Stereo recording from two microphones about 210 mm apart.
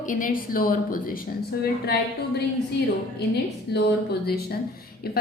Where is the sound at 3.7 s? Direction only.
50° left (ahead or behind).